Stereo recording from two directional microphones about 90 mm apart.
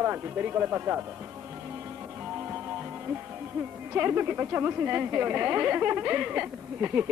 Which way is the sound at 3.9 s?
20° right (ahead or behind).